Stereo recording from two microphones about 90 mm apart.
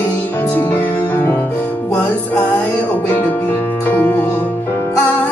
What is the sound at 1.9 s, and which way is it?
Music, 15° left (ahead or behind).